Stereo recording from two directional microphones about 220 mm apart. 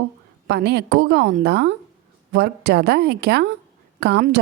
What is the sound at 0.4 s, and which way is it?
Speech, 50° right (ahead or behind).